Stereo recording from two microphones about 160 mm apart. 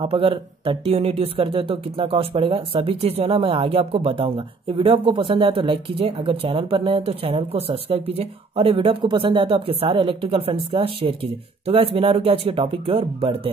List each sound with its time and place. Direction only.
0.0 s speech: 35° right (ahead or behind)